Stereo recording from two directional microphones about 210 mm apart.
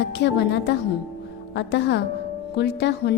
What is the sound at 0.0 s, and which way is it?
A woman's voice, 55° left (ahead or behind).